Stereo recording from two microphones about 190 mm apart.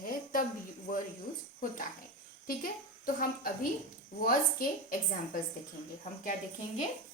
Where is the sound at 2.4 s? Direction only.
50° left (ahead or behind).